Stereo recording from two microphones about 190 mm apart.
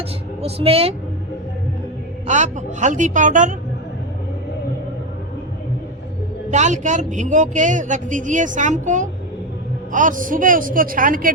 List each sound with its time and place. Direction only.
0.4 s speech: 30° right (ahead or behind)
2.2 s speech: 40° right (ahead or behind)
6.5 s a man's voice: 40° right (ahead or behind)